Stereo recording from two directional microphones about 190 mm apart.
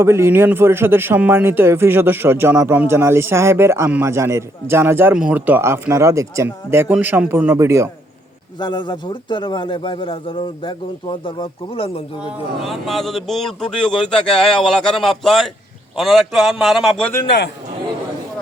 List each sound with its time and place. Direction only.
0.0 s a man's voice: 15° right (ahead or behind)
8.5 s a man's voice: 25° left (ahead or behind)
12.2 s speech: centre (ahead or behind)